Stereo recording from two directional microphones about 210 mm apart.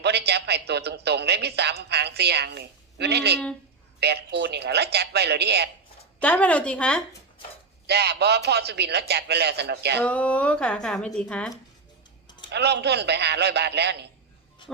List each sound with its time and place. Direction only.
0.0 s a woman's voice: 50° right (ahead or behind)
6.2 s speech: 5° left (ahead or behind)
7.9 s a woman's voice: 50° right (ahead or behind)
10.0 s speech: 5° left (ahead or behind)
12.5 s a woman's voice: 50° right (ahead or behind)